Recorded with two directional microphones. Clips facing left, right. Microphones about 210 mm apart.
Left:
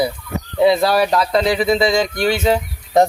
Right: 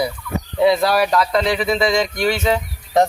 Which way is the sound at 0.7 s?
25° left (ahead or behind).